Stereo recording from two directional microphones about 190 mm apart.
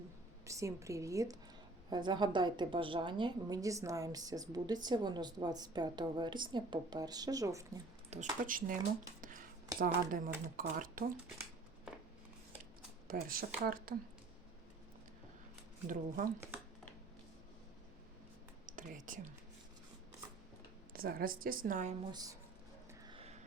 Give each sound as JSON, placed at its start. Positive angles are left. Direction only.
{"t": 0.4, "sound": "a woman's voice", "side_deg": -15}
{"t": 8.1, "sound": "speech", "side_deg": -35}
{"t": 8.4, "sound": "speech", "side_deg": -45}
{"t": 13.1, "sound": "speech", "side_deg": -50}
{"t": 15.9, "sound": "speech", "side_deg": -45}
{"t": 18.8, "sound": "whispering", "side_deg": -45}
{"t": 20.9, "sound": "speech", "side_deg": -50}
{"t": 22.1, "sound": "a woman's voice", "side_deg": -20}
{"t": 23.0, "sound": "a sound", "side_deg": -30}